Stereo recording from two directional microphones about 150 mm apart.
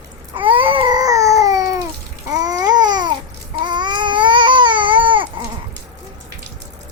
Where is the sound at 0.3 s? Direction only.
35° right (ahead or behind).